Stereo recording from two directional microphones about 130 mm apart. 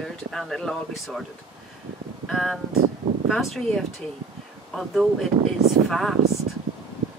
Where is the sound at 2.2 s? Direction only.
Centre (ahead or behind).